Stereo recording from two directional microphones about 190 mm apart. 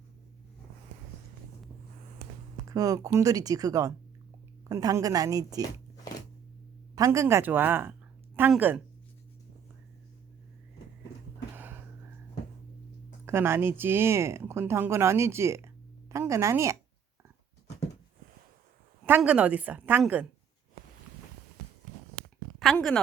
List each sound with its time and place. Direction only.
2.6 s a woman's voice: 15° right (ahead or behind)
6.9 s speech: 15° right (ahead or behind)
11.5 s music: 10° right (ahead or behind)
13.2 s speech: 15° right (ahead or behind)
19.0 s speech: 10° right (ahead or behind)
22.6 s a woman's voice: centre (ahead or behind)